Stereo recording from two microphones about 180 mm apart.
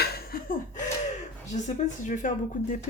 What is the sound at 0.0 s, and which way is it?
Laughter, 60° left (ahead or behind).